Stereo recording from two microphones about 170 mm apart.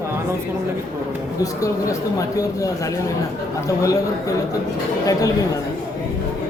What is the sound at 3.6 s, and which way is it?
Speech, 20° left (ahead or behind).